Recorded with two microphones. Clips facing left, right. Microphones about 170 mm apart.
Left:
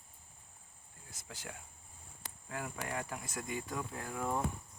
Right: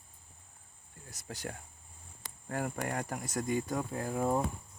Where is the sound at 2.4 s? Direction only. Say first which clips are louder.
Right 7 dB; 50° right (ahead or behind).